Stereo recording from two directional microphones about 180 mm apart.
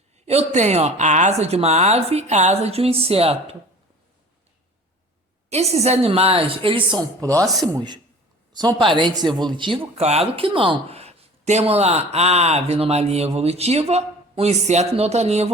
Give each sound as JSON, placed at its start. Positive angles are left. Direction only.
{"t": 0.3, "sound": "speech", "side_deg": -40}
{"t": 5.5, "sound": "speech", "side_deg": -35}